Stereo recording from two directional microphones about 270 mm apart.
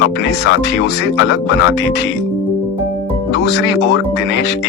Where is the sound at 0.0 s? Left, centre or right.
Left.